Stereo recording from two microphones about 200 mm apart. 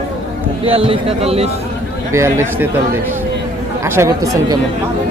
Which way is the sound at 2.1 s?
15° right (ahead or behind).